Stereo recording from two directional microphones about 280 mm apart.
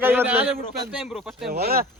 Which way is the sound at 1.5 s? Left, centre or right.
Right.